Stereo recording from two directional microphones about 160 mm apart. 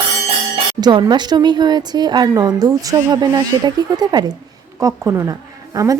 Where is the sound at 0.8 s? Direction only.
25° right (ahead or behind).